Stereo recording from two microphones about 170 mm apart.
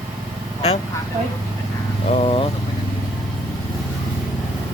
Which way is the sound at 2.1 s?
35° left (ahead or behind).